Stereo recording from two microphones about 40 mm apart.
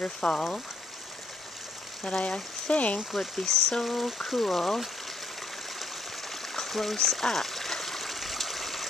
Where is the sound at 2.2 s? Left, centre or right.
Left.